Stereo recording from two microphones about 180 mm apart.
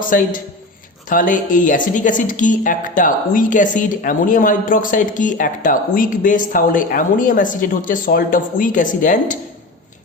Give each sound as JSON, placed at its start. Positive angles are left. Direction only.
{"t": 0.0, "sound": "speech", "side_deg": 50}